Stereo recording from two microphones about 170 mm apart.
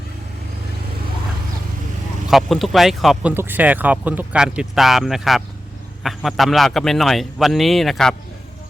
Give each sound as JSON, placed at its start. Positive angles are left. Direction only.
{"t": 2.3, "sound": "speech", "side_deg": 0}
{"t": 3.3, "sound": "speech", "side_deg": -10}